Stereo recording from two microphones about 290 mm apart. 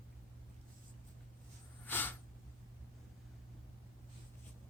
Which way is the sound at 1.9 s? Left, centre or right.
Centre.